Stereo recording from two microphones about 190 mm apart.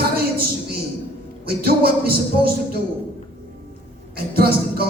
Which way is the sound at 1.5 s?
55° right (ahead or behind).